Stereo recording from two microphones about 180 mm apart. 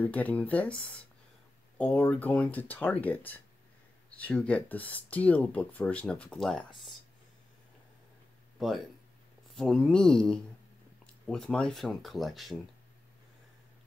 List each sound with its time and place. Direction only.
0.0 s speech: 10° left (ahead or behind)
8.5 s speech: centre (ahead or behind)